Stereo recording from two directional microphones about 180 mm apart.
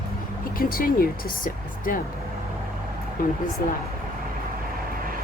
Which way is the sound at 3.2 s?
55° left (ahead or behind).